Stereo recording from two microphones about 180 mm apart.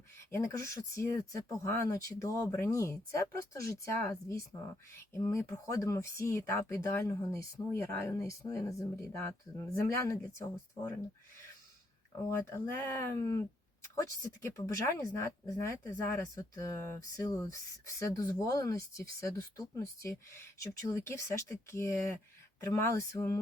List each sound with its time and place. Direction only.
0.3 s speech: 15° left (ahead or behind)
12.3 s speech: 10° left (ahead or behind)